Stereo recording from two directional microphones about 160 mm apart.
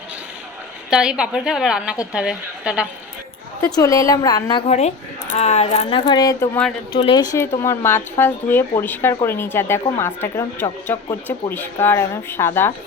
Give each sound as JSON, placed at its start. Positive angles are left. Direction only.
{"t": 0.9, "sound": "a woman's voice", "side_deg": -5}
{"t": 3.6, "sound": "a woman's voice", "side_deg": 20}
{"t": 4.6, "sound": "a woman's voice", "side_deg": 45}